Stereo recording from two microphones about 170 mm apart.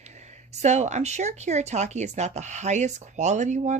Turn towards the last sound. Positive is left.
turn(degrees=-45)  # may be behind; listen again after turning